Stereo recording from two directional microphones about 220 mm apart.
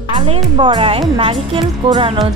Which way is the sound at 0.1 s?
20° right (ahead or behind).